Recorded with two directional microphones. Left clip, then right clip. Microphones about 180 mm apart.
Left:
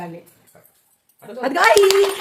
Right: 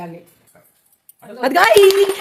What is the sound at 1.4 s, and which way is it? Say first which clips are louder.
Speech: right 3 dB; 60° right (ahead or behind).